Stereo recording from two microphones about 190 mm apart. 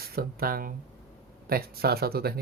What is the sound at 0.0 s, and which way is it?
Speech, 50° right (ahead or behind).